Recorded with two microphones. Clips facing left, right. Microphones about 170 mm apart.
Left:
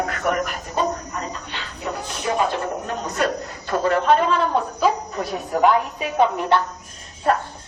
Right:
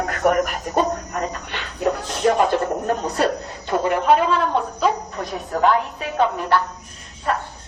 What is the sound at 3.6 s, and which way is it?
Speech, 15° right (ahead or behind).